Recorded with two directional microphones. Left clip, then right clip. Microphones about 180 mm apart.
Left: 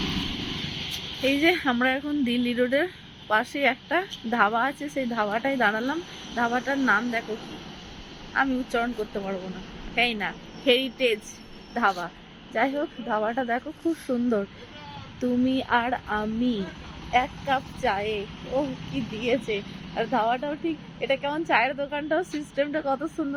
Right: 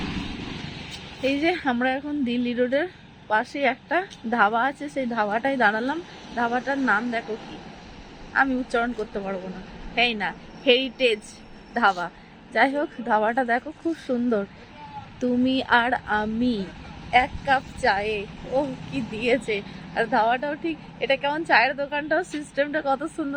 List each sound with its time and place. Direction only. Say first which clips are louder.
1.2 s a woman's voice: left 1 dB; centre (ahead or behind)
8.3 s a woman's voice: right 3 dB; 5° right (ahead or behind)
14.1 s speech: right 2 dB; centre (ahead or behind)
15.4 s a woman's voice: right 5 dB; 10° right (ahead or behind)